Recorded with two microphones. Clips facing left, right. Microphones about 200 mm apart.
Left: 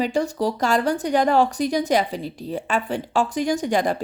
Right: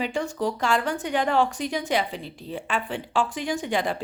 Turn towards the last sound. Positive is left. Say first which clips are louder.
# left 5 dB
turn(degrees=45)  # may be behind; listen again after turning